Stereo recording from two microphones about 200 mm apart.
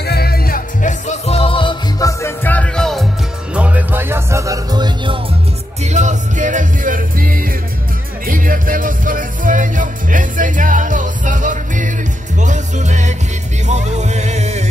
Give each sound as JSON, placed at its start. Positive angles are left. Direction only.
{"t": 0.0, "sound": "music", "side_deg": 50}
{"t": 5.9, "sound": "music", "side_deg": -35}